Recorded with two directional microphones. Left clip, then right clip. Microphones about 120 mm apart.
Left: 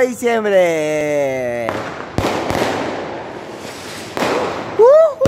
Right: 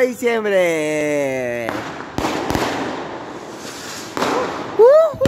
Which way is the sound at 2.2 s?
Centre (ahead or behind).